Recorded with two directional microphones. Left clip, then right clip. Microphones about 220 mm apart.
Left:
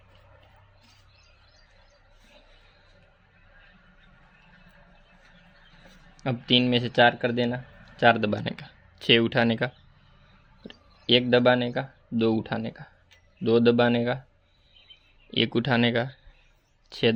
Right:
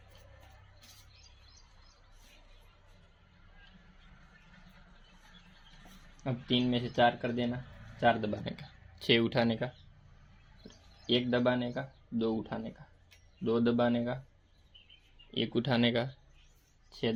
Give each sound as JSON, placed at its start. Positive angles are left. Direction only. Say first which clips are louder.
{"t": 6.1, "sound": "speech", "louder": "left 10 dB", "side_deg": 45}
{"t": 8.5, "sound": "speech", "louder": "left 6 dB", "side_deg": 25}
{"t": 11.0, "sound": "speech", "louder": "left 10 dB", "side_deg": 45}
{"t": 15.3, "sound": "speech", "louder": "left 8 dB", "side_deg": 40}
{"t": 15.6, "sound": "speech", "louder": "left 6 dB", "side_deg": 25}
{"t": 16.9, "sound": "speech", "louder": "left 10 dB", "side_deg": 45}